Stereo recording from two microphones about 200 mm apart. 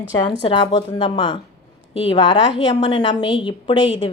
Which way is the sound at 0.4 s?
20° left (ahead or behind).